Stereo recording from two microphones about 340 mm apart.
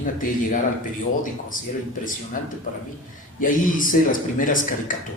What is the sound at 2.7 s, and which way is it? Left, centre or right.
A man's voice, left.